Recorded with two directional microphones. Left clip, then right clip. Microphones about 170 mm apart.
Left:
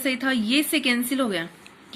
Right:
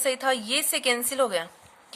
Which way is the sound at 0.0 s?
60° right (ahead or behind).